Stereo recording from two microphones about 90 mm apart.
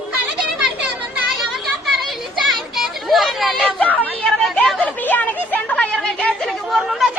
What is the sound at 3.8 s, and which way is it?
Chatter, 15° left (ahead or behind).